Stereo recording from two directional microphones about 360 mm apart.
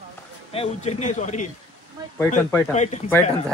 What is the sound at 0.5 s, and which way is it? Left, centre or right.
Speech, centre.